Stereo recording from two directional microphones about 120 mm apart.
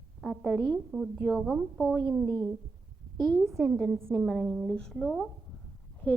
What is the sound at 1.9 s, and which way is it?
A woman's voice, 25° right (ahead or behind).